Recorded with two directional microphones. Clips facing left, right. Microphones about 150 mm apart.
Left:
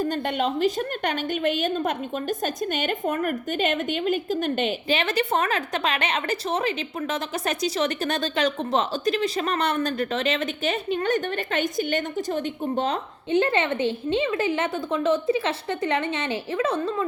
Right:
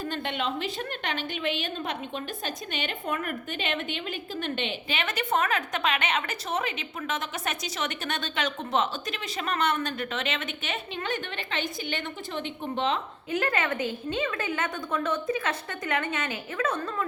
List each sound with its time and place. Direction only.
0.0 s a woman's voice: 45° left (ahead or behind)
13.3 s a woman's voice: 30° left (ahead or behind)